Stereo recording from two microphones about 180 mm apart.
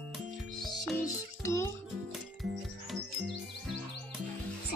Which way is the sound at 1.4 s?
15° left (ahead or behind).